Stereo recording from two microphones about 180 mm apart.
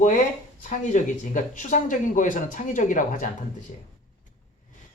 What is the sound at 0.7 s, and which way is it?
Speech, 45° left (ahead or behind).